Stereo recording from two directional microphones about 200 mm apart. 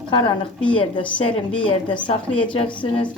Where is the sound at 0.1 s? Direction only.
25° left (ahead or behind).